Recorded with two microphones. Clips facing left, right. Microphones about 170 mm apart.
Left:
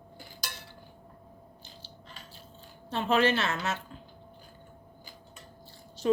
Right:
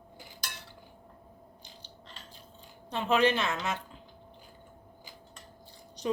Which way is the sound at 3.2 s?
15° right (ahead or behind).